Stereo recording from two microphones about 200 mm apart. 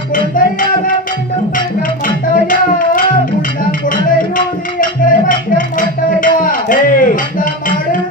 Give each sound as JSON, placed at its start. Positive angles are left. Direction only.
{"t": 0.1, "sound": "music", "side_deg": 40}
{"t": 2.0, "sound": "tabla", "side_deg": 40}
{"t": 4.4, "sound": "a sound", "side_deg": 40}